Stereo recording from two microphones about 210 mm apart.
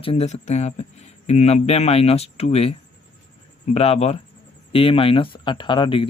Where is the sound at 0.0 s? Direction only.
30° left (ahead or behind).